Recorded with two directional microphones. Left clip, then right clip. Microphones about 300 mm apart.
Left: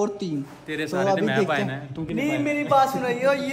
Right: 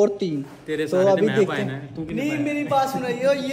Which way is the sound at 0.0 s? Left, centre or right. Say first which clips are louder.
Right 6 dB; centre.